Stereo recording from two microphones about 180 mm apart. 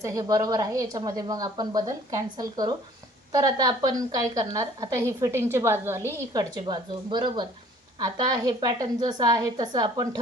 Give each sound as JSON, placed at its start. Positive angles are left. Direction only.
{"t": 0.0, "sound": "speech", "side_deg": -20}